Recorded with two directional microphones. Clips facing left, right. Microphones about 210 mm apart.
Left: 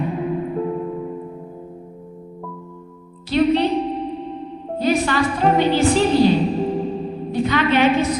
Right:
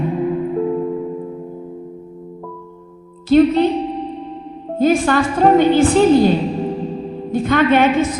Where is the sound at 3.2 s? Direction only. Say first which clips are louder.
Right 5 dB; 45° right (ahead or behind).